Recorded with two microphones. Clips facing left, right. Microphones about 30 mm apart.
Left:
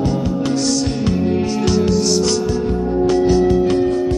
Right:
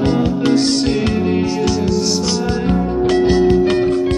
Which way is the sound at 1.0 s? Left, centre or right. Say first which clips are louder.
Right 1 dB; right.